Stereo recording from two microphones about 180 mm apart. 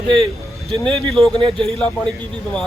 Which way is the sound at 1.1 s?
Centre (ahead or behind).